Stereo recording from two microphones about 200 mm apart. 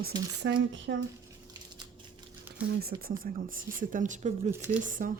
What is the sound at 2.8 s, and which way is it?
Speech, 50° right (ahead or behind).